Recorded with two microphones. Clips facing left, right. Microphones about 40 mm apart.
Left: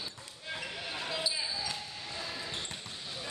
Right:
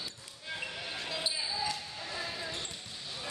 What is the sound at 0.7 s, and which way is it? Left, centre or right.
Basketball bounce, centre.